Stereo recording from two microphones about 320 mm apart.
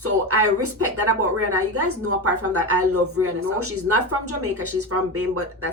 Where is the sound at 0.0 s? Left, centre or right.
Right.